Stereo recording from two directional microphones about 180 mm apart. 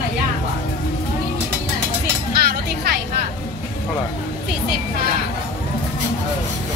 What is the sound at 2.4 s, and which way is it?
Music, 65° right (ahead or behind).